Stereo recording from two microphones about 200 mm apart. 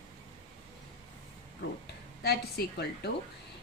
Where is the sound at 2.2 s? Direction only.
55° left (ahead or behind).